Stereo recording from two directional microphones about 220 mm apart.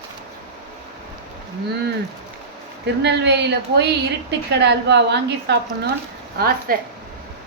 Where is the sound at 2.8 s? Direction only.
50° right (ahead or behind).